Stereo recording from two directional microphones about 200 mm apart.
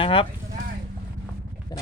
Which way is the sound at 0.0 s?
25° left (ahead or behind).